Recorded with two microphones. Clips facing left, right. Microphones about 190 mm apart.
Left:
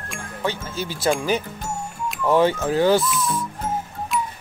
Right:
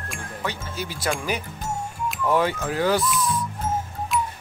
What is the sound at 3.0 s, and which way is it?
Speech, 5° left (ahead or behind).